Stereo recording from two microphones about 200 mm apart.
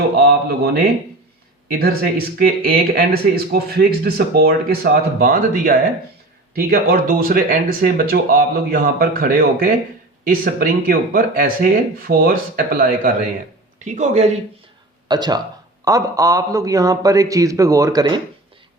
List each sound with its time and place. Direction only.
0.2 s speech: 50° right (ahead or behind); by 14.3 s 35° right (ahead or behind)
15.0 s a man's voice: 20° right (ahead or behind)